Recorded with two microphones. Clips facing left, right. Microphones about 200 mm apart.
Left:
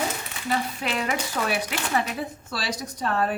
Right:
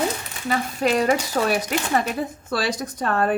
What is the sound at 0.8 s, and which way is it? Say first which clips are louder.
A woman's voice: right 8 dB; 40° right (ahead or behind).